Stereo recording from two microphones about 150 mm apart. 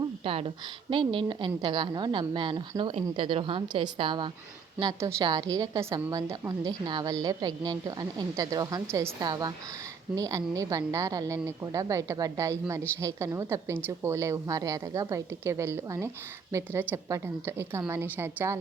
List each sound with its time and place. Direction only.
0.3 s a woman's voice: 40° right (ahead or behind)
4.8 s a woman's voice: 20° right (ahead or behind)